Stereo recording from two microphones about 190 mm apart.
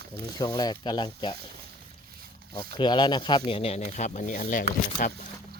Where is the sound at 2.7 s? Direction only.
25° left (ahead or behind); by 5.3 s 45° left (ahead or behind).